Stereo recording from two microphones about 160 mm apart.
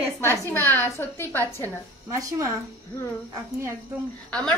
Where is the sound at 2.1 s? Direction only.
20° right (ahead or behind).